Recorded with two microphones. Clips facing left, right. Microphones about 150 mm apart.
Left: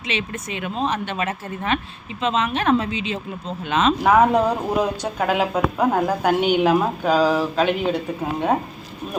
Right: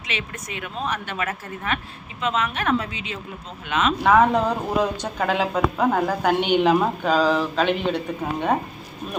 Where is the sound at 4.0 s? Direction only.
10° left (ahead or behind).